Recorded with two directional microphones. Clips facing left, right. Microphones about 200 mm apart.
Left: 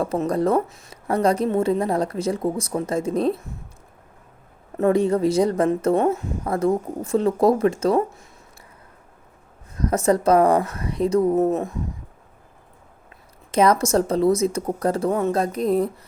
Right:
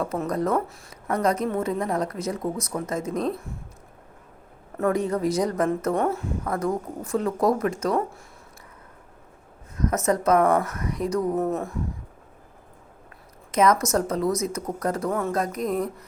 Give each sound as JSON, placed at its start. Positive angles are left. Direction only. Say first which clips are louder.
{"t": 0.0, "sound": "a woman's voice", "louder": "left 4 dB", "side_deg": 30}
{"t": 4.8, "sound": "a woman's voice", "louder": "left 5 dB", "side_deg": 30}
{"t": 9.7, "sound": "a woman's voice", "louder": "left 4 dB", "side_deg": 30}
{"t": 13.5, "sound": "a woman's voice", "louder": "left 3 dB", "side_deg": 30}